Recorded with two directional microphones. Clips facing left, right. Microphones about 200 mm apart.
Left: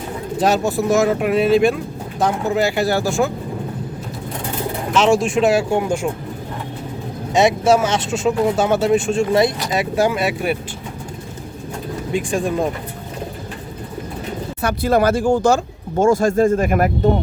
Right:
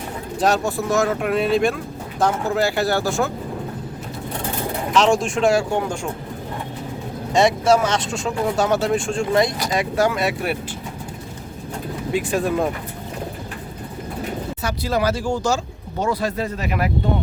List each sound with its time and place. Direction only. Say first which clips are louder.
0.3 s speech: left 2 dB; centre (ahead or behind)
4.9 s speech: left 3 dB; 5° left (ahead or behind)
7.3 s speech: left 2 dB; 5° left (ahead or behind)
12.1 s speech: left 1 dB; 5° right (ahead or behind)
14.6 s speech: left 6 dB; 55° left (ahead or behind)